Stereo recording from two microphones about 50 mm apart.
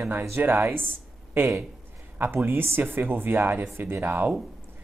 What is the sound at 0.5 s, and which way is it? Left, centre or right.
Speech, right.